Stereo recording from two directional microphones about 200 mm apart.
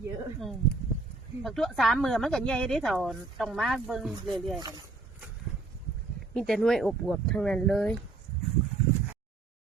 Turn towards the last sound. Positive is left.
turn(degrees=0)  # may be behind; listen again after turning